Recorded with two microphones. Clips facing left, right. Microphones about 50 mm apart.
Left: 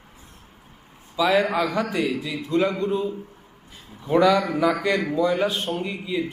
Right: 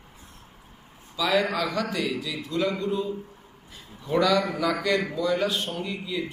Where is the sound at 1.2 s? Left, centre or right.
Centre.